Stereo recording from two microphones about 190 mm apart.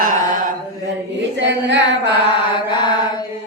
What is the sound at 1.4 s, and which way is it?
Child singing, 70° right (ahead or behind).